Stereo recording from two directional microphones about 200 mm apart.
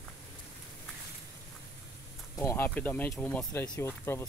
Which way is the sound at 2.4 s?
10° left (ahead or behind).